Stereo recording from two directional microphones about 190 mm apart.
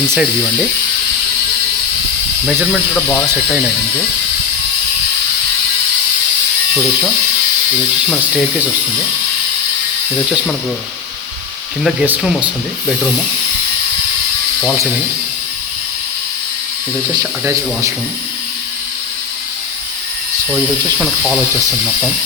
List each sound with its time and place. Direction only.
0.1 s speech: centre (ahead or behind)
2.5 s speech: 5° left (ahead or behind)
11.8 s speech: centre (ahead or behind)
17.2 s speech: 15° right (ahead or behind)